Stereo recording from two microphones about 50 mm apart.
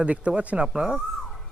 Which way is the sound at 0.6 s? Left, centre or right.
Centre.